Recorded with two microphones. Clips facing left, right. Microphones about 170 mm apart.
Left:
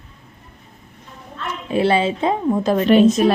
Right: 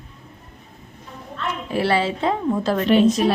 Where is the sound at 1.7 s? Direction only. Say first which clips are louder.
Left 4 dB; 20° left (ahead or behind).